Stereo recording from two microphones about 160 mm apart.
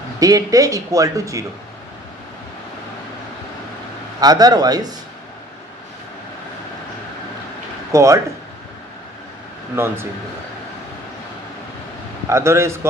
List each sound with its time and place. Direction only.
0.2 s speech: 20° right (ahead or behind)
4.2 s speech: 25° right (ahead or behind)
7.9 s speech: 20° right (ahead or behind)
9.7 s a man's voice: 15° right (ahead or behind)
12.3 s a man's voice: 15° right (ahead or behind)